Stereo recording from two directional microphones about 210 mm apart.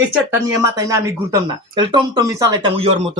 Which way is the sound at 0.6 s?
15° right (ahead or behind).